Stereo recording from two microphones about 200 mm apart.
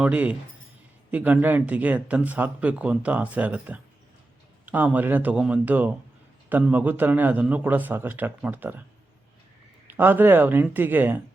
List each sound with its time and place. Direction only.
0.0 s speech: 5° right (ahead or behind)
9.8 s speech: 10° right (ahead or behind)